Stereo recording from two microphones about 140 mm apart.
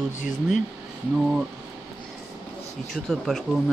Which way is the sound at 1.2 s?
5° right (ahead or behind).